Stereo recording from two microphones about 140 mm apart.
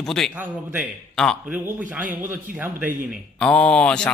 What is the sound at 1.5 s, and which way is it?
A man's voice, 10° right (ahead or behind).